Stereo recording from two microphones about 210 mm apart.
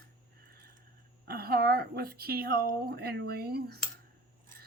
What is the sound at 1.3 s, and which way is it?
Coin, 45° right (ahead or behind).